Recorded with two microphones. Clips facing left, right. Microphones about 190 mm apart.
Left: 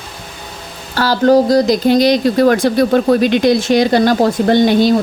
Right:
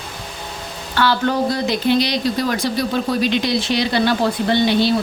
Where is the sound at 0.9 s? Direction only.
40° left (ahead or behind).